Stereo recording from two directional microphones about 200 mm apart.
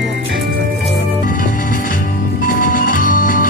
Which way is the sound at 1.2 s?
40° left (ahead or behind).